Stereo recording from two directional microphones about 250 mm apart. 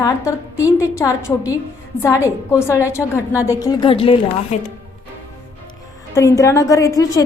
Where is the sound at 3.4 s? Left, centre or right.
Centre.